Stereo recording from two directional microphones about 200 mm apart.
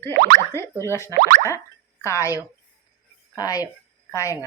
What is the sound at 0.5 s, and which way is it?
Speech, 15° left (ahead or behind).